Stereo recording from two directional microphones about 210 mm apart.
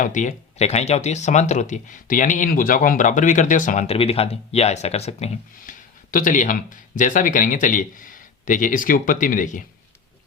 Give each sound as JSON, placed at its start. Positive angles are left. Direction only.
{"t": 0.0, "sound": "speech", "side_deg": 35}